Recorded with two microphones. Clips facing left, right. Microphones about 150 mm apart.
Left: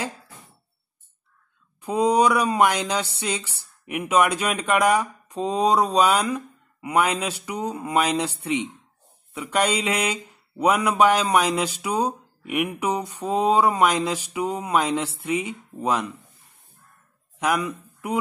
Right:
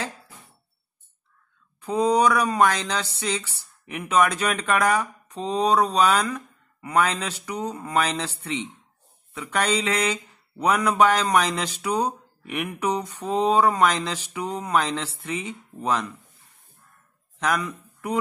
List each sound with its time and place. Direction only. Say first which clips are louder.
1.8 s speech: left 1 dB; 10° left (ahead or behind)
17.4 s speech: left 2 dB; 10° left (ahead or behind)